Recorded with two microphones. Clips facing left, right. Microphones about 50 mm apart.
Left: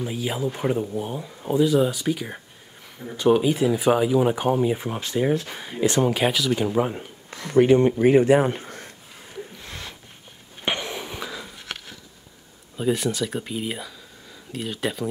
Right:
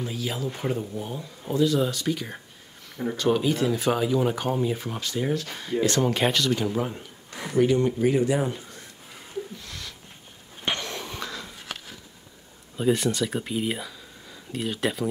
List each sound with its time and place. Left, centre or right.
0.0 s speech: centre
6.1 s speech: centre
6.5 s speech: centre; by 8.9 s left
9.6 s a sound: left
10.6 s a sound: centre
12.7 s speech: centre